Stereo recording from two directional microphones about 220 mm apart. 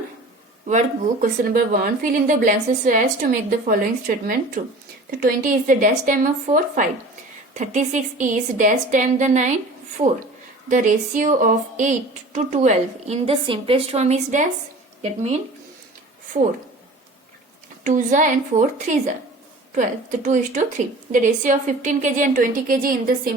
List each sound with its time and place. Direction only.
0.7 s a woman's voice: 35° right (ahead or behind)
17.8 s a woman's voice: 35° right (ahead or behind)